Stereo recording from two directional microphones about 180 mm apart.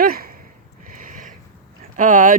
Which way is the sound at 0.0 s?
55° right (ahead or behind).